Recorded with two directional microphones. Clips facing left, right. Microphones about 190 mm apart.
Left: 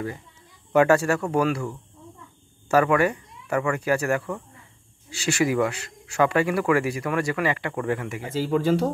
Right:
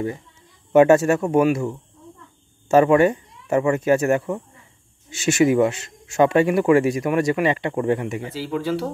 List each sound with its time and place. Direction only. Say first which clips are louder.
0.7 s speech: right 5 dB; 20° right (ahead or behind)
8.3 s speech: left 5 dB; 45° left (ahead or behind)